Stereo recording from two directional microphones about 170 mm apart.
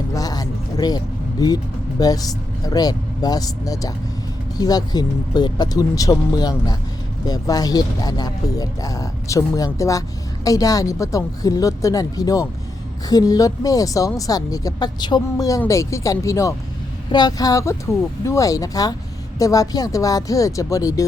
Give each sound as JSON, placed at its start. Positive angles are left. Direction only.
{"t": 0.1, "sound": "speech", "side_deg": 20}